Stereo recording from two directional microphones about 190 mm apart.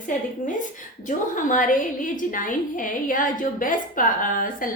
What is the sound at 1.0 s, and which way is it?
A woman's voice, 40° left (ahead or behind).